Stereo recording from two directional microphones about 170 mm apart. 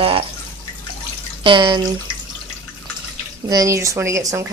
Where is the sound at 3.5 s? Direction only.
20° right (ahead or behind).